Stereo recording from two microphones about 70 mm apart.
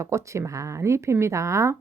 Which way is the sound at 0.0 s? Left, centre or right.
Right.